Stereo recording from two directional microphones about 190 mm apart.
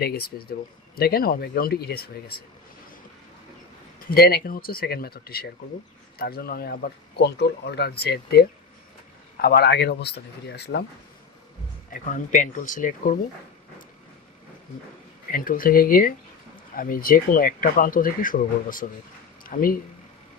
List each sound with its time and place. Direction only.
0.0 s speech: 55° left (ahead or behind)
4.3 s speech: 50° left (ahead or behind)
12.0 s speech: 40° left (ahead or behind)
15.3 s speech: 50° left (ahead or behind)